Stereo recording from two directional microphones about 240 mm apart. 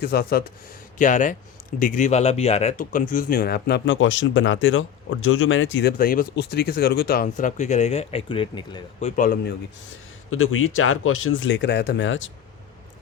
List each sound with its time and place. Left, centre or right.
0.0 s speech: left
6.0 s speech: left
10.2 s speech: left